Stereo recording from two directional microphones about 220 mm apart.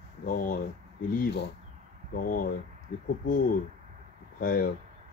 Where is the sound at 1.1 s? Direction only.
50° left (ahead or behind).